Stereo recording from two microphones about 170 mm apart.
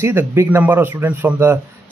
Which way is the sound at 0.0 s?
15° right (ahead or behind).